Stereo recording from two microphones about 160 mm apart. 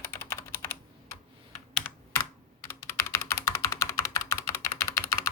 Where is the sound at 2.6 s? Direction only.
15° left (ahead or behind).